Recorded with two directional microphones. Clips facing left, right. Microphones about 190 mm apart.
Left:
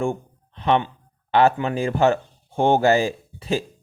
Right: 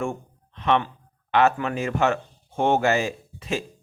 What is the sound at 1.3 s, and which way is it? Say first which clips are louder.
Speech: left 3 dB; 30° left (ahead or behind).